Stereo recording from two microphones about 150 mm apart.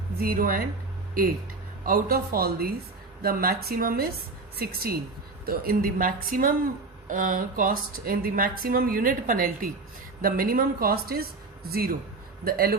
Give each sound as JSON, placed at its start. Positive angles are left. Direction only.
{"t": 0.2, "sound": "a woman's voice", "side_deg": -75}
{"t": 1.8, "sound": "a woman's voice", "side_deg": -75}
{"t": 5.5, "sound": "a woman's voice", "side_deg": -75}